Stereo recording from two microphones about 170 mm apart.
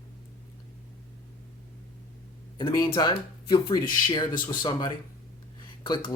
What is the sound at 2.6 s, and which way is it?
Speech, 25° left (ahead or behind).